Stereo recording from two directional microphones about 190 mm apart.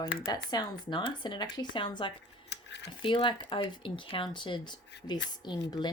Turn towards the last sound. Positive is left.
turn(degrees=25)  # may be behind; listen again after turning